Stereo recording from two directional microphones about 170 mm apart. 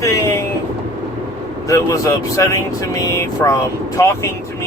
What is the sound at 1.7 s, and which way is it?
Speech, 20° left (ahead or behind).